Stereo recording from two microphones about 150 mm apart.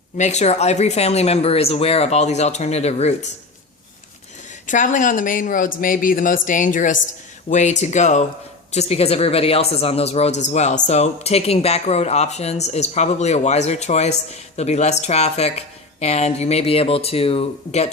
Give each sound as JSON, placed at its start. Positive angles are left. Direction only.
{"t": 0.2, "sound": "speech", "side_deg": 50}
{"t": 4.6, "sound": "speech", "side_deg": 60}